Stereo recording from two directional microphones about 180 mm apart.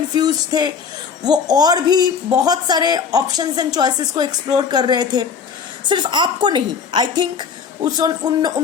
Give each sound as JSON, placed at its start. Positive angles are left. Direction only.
{"t": 0.1, "sound": "a man's voice", "side_deg": -20}